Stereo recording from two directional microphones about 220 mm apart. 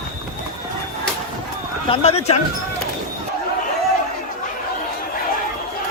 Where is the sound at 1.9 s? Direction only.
25° left (ahead or behind).